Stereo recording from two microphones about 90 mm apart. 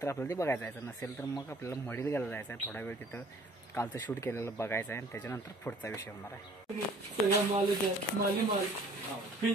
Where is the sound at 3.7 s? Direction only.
30° left (ahead or behind).